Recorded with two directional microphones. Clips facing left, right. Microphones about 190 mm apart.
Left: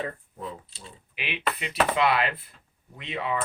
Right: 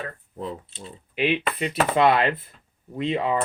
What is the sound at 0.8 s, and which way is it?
Speech, 40° right (ahead or behind).